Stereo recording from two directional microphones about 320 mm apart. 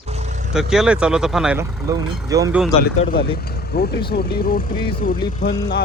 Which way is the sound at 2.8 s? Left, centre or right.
Left.